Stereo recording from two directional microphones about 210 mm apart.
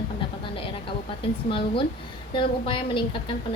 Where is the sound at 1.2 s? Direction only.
25° left (ahead or behind).